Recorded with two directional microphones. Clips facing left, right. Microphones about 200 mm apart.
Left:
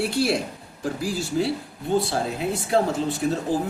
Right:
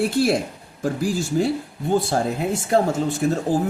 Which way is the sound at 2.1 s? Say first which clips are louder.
Right 3 dB; 45° right (ahead or behind).